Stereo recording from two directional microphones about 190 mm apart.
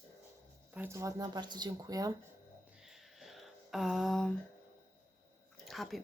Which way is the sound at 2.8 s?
Centre (ahead or behind).